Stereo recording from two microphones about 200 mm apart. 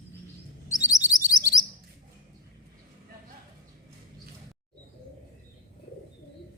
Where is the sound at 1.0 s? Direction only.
15° left (ahead or behind).